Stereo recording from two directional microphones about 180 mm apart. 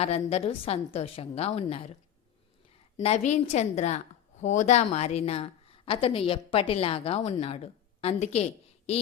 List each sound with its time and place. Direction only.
0.0 s a woman's voice: 35° left (ahead or behind)
3.0 s a woman's voice: 40° left (ahead or behind)